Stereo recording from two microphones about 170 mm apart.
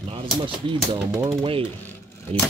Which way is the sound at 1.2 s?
30° right (ahead or behind).